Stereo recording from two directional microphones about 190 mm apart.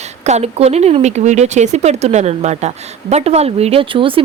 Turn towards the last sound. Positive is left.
turn(degrees=-25)  # may be behind; listen again after turning